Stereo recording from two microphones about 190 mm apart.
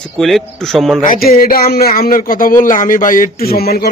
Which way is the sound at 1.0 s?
45° left (ahead or behind).